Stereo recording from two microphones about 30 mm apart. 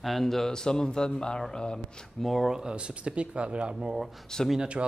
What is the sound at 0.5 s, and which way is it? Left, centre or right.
Speech, left.